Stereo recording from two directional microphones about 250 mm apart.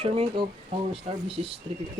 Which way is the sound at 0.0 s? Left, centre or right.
Right.